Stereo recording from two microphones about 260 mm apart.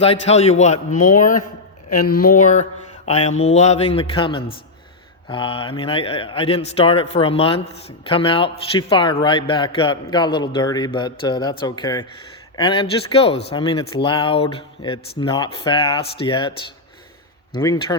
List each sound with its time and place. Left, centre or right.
0.0 s speech: left
17.5 s speech: centre